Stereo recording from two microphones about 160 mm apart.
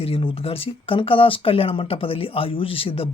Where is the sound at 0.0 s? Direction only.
35° left (ahead or behind).